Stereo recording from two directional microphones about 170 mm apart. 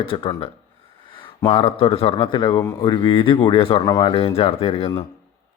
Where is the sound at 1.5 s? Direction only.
35° left (ahead or behind).